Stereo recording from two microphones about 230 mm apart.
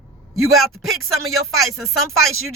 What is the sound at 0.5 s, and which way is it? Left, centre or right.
Speech, centre.